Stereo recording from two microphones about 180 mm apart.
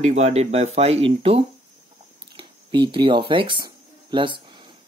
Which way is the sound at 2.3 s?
30° right (ahead or behind).